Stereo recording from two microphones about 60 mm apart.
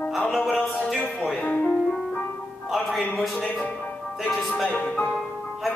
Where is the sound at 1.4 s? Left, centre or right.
Left.